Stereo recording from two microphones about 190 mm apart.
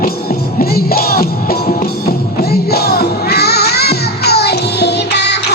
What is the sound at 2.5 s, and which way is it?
Music, 55° left (ahead or behind).